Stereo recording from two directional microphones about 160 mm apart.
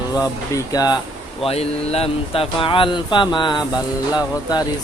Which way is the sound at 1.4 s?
40° left (ahead or behind).